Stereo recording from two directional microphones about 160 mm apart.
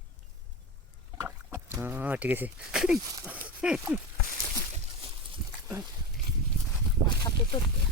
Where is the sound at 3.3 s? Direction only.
10° right (ahead or behind).